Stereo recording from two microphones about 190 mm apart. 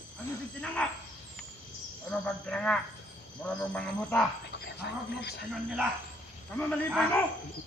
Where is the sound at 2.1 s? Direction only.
5° left (ahead or behind).